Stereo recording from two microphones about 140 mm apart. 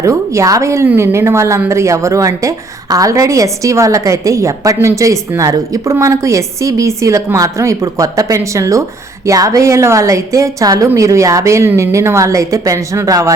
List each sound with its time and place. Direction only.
0.0 s a woman's voice: 20° right (ahead or behind)